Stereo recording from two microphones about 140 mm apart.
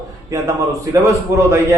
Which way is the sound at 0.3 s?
20° right (ahead or behind).